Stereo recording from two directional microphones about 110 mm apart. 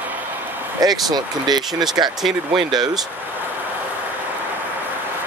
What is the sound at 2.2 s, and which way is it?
Speech, centre (ahead or behind).